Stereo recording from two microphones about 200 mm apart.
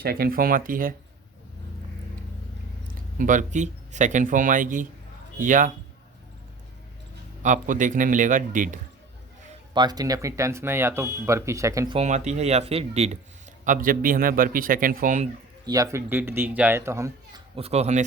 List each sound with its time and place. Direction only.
0.0 s a man's voice: 50° right (ahead or behind)
2.8 s speech: 40° right (ahead or behind)
7.4 s speech: 40° right (ahead or behind)
9.7 s speech: 20° right (ahead or behind)
11.9 s speech: 35° right (ahead or behind)
13.7 s a man's voice: 45° right (ahead or behind)
15.6 s speech: 20° right (ahead or behind)
17.5 s speech: 30° right (ahead or behind)